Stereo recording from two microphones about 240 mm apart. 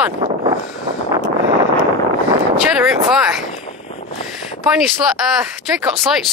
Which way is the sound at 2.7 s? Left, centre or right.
Centre.